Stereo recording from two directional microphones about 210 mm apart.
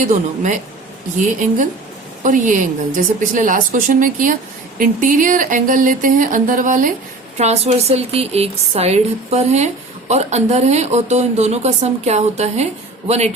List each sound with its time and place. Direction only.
0.0 s speech: 35° right (ahead or behind)